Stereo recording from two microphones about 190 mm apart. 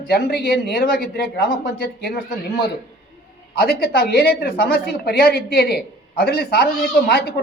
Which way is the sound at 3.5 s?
55° left (ahead or behind).